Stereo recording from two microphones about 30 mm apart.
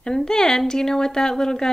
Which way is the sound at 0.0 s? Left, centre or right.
Left.